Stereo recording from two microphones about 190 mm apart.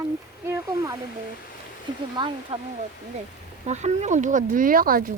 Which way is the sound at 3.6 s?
35° right (ahead or behind).